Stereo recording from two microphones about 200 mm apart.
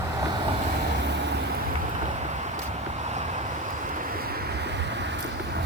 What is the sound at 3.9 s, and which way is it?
Waves, 45° right (ahead or behind).